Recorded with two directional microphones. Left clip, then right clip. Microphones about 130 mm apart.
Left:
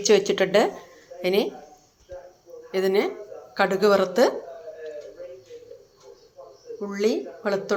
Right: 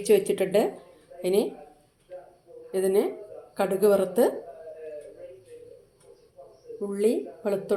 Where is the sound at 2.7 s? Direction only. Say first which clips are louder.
Left 2 dB; 15° right (ahead or behind).